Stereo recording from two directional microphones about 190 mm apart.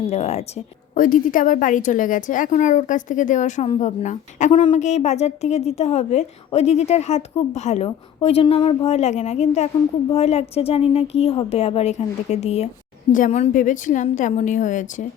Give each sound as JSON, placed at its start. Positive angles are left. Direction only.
{"t": 0.1, "sound": "a woman's voice", "side_deg": 35}